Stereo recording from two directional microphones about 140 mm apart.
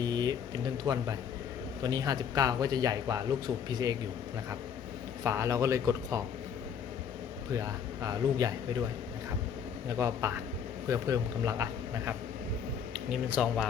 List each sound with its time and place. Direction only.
0.0 s a sound: 30° right (ahead or behind)
0.9 s a man's voice: 30° right (ahead or behind)
5.2 s a man's voice: 20° right (ahead or behind)
7.5 s a man's voice: 25° right (ahead or behind)
10.0 s a man's voice: 20° right (ahead or behind)
13.1 s speech: 5° right (ahead or behind)